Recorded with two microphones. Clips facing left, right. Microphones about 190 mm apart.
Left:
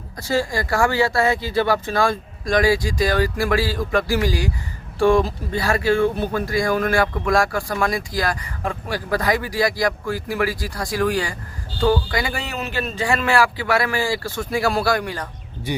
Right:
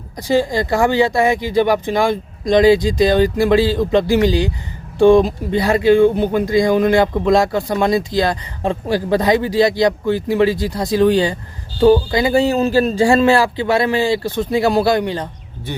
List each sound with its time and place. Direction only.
0.2 s speech: 20° right (ahead or behind)